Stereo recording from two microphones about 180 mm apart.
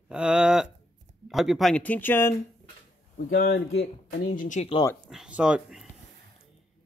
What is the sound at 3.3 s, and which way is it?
Speech, 60° left (ahead or behind).